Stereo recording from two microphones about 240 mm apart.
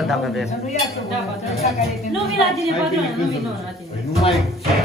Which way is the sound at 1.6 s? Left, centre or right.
Left.